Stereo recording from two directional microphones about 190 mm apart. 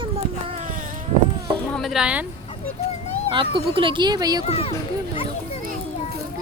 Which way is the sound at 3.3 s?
25° right (ahead or behind).